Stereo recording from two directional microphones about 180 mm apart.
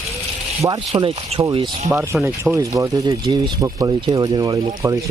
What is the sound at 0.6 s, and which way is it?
Speech, 20° right (ahead or behind).